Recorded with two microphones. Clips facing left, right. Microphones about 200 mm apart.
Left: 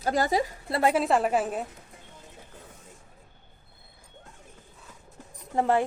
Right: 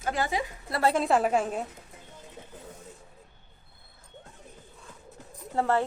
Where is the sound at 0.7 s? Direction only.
15° left (ahead or behind).